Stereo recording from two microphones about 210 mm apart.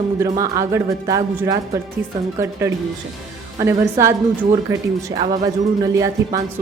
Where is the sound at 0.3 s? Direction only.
15° right (ahead or behind).